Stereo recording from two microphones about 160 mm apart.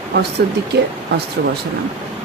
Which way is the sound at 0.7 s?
90° right.